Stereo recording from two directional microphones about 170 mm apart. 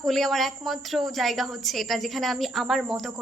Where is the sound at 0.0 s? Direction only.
Centre (ahead or behind).